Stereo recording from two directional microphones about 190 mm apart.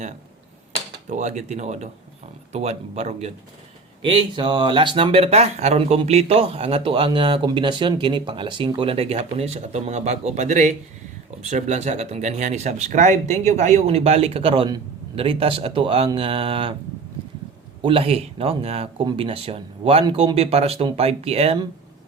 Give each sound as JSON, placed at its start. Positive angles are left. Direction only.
{"t": 1.0, "sound": "speech", "side_deg": -40}
{"t": 17.8, "sound": "speech", "side_deg": -30}